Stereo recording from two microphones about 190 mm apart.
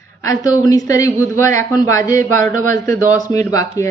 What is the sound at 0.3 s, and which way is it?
Speech, 20° left (ahead or behind).